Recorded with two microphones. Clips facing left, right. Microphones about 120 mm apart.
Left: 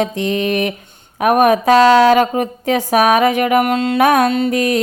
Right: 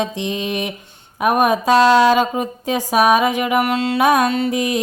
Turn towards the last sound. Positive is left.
turn(degrees=60)  # may be behind; listen again after turning